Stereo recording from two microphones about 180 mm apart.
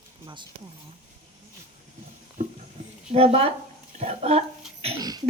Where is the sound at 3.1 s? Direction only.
30° right (ahead or behind).